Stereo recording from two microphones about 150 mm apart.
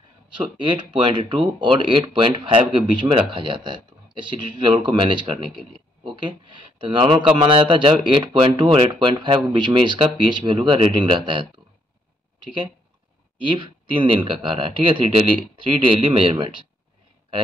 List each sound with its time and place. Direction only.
0.4 s speech: 30° right (ahead or behind)
13.4 s speech: 35° right (ahead or behind)